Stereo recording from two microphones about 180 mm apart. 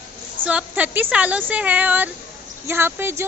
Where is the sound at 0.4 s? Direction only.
10° right (ahead or behind).